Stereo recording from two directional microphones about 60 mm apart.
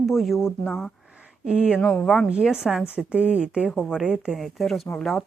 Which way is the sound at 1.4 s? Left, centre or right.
Centre.